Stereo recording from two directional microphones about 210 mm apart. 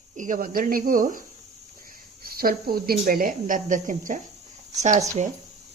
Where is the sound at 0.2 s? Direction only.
40° right (ahead or behind).